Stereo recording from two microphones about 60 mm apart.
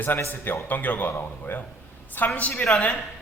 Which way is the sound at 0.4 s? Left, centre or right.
Left.